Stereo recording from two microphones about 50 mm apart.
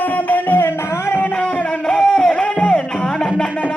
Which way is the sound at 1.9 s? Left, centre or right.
Centre.